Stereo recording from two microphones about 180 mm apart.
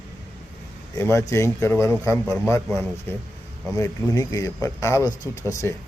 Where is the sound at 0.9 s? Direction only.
15° left (ahead or behind).